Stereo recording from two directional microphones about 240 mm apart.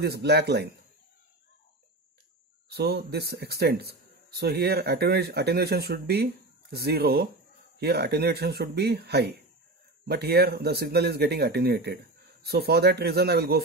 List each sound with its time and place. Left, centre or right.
0.0 s speech: right
2.7 s speech: right